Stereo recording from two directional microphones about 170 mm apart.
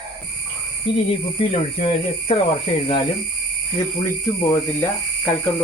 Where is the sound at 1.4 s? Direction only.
35° left (ahead or behind).